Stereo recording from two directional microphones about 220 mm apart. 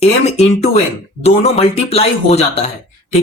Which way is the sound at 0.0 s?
30° left (ahead or behind).